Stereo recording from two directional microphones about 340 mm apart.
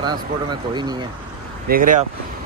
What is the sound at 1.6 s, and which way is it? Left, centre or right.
Speech, right.